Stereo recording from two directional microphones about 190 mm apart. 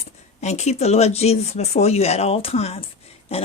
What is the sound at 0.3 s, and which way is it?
A woman's voice, 35° left (ahead or behind).